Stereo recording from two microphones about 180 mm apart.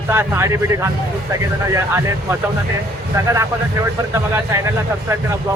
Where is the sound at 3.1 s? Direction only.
15° right (ahead or behind).